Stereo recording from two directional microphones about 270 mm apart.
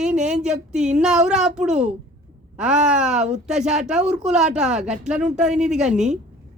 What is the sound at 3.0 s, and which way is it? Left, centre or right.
Speech, centre.